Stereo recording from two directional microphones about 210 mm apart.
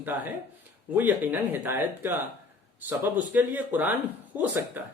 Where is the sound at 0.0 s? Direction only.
10° right (ahead or behind).